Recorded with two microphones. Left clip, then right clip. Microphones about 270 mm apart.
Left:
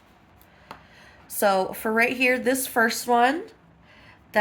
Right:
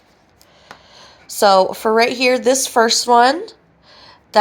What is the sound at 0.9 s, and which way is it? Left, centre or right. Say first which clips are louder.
Speech: right 10 dB; right.